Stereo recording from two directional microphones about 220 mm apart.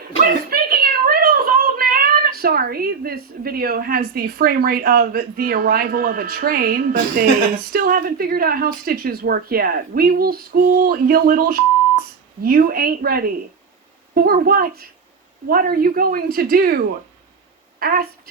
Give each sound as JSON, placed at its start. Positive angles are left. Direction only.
{"t": 0.5, "sound": "a woman's voice", "side_deg": -40}